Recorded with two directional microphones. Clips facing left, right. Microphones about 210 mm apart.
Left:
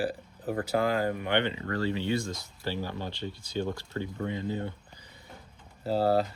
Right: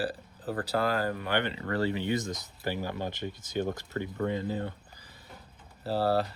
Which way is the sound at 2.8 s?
45° right (ahead or behind).